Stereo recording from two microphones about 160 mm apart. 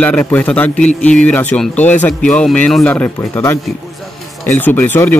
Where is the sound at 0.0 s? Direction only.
10° left (ahead or behind).